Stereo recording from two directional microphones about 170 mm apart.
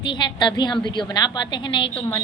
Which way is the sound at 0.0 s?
25° left (ahead or behind).